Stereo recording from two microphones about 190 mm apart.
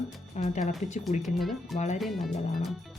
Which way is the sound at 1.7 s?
40° left (ahead or behind).